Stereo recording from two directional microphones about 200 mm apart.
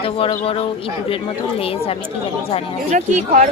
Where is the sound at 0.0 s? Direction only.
30° left (ahead or behind).